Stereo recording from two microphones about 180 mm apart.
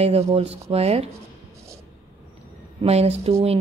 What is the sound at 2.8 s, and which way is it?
Speech, 35° right (ahead or behind).